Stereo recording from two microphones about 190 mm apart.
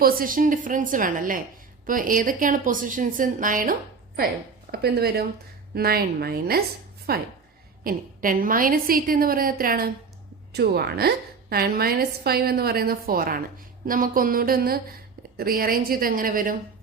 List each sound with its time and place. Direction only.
0.0 s a woman's voice: 45° right (ahead or behind)
4.7 s a woman's voice: 55° right (ahead or behind)